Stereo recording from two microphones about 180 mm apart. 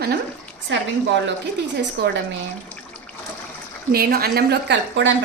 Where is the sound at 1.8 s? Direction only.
75° right (ahead or behind).